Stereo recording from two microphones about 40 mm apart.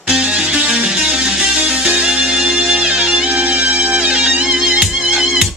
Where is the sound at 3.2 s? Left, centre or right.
Right; by 5.5 s centre.